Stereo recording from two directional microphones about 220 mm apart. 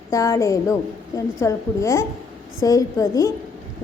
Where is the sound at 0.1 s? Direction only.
15° left (ahead or behind).